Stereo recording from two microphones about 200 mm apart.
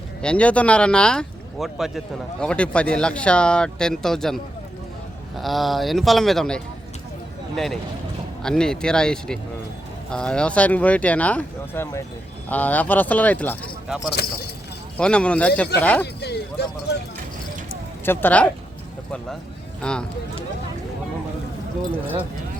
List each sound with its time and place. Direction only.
0.2 s speech: 5° left (ahead or behind)
5.4 s speech: centre (ahead or behind)
13.8 s speech: 5° right (ahead or behind)
16.2 s a sound: 55° left (ahead or behind)
18.0 s speech: 10° left (ahead or behind)
19.8 s speech: 5° left (ahead or behind)